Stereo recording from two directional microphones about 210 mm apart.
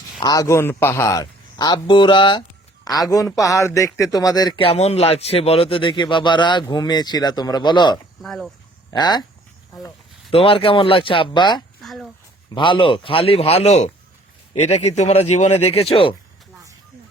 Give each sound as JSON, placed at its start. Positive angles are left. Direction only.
{"t": 0.2, "sound": "a man's voice", "side_deg": 15}
{"t": 8.2, "sound": "speech", "side_deg": 0}
{"t": 8.9, "sound": "speech", "side_deg": 20}
{"t": 10.3, "sound": "speech", "side_deg": 25}
{"t": 11.8, "sound": "a sound", "side_deg": 0}
{"t": 12.5, "sound": "speech", "side_deg": 25}